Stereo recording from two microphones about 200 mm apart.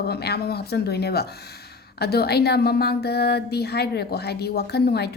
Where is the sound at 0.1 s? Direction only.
55° left (ahead or behind).